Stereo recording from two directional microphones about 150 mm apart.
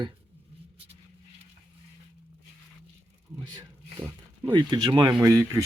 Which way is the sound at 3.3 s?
30° right (ahead or behind).